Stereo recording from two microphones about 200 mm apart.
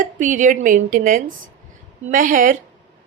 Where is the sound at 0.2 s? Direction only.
40° right (ahead or behind).